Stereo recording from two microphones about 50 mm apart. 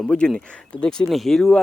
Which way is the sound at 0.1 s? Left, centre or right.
Centre.